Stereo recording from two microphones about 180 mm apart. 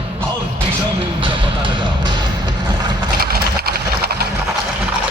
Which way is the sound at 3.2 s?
60° right (ahead or behind).